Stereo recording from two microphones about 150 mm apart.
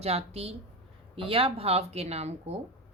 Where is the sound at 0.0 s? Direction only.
45° right (ahead or behind).